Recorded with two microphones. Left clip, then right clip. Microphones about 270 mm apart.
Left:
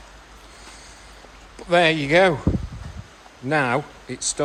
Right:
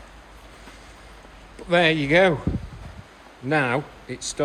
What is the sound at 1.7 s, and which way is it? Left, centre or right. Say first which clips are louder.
Speech: left 1 dB; centre.